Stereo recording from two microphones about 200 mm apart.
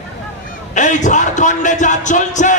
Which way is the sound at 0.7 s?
35° left (ahead or behind).